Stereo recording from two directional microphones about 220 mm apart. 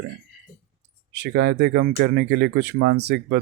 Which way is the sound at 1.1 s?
50° right (ahead or behind).